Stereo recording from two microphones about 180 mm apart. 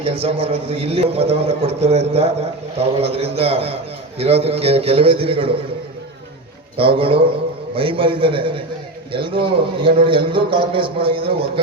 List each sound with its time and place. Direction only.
0.0 s a man's voice: 35° right (ahead or behind)
6.7 s a man's voice: 30° right (ahead or behind)